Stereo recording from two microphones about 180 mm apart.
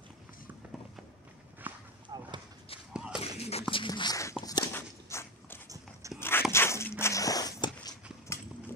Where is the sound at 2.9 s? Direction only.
5° right (ahead or behind).